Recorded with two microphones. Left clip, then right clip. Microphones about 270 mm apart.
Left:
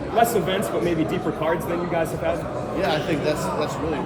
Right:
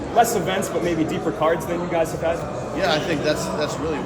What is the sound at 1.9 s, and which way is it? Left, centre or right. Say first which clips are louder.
Speech: right 3 dB; right.